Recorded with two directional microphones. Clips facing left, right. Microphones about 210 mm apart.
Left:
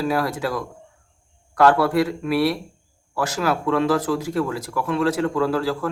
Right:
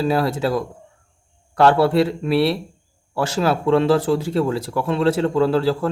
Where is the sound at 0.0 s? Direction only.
25° right (ahead or behind).